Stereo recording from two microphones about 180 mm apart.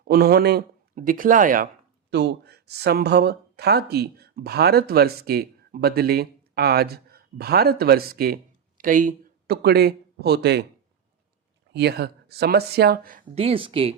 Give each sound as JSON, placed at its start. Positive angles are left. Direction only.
{"t": 0.0, "sound": "speech", "side_deg": -60}
{"t": 0.9, "sound": "speech", "side_deg": -50}
{"t": 2.0, "sound": "speech", "side_deg": -70}
{"t": 11.7, "sound": "speech", "side_deg": -65}
{"t": 13.3, "sound": "speech", "side_deg": -30}